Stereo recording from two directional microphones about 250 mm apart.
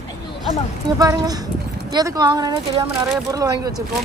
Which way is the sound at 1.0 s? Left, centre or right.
Centre.